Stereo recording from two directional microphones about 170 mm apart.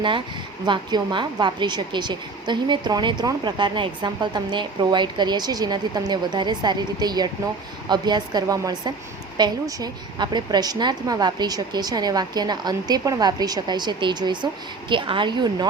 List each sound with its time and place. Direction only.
0.6 s a woman's voice: 25° right (ahead or behind)